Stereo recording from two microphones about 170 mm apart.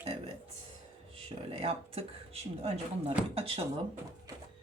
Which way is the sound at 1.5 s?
35° right (ahead or behind).